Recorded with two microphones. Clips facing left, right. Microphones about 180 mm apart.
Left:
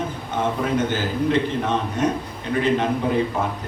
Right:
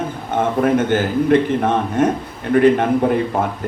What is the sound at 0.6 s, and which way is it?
A man's voice, 55° right (ahead or behind).